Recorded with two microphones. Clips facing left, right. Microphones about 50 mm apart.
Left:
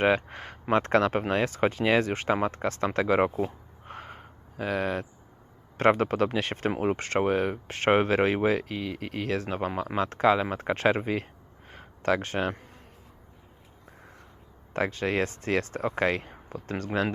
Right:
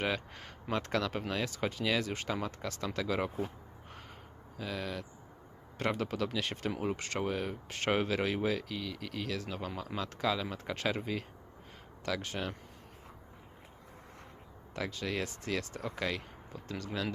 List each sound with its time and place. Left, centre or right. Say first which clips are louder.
0.0 s speech: left 11 dB; left
11.7 s a sound: left 10 dB; left
14.7 s speech: left 9 dB; left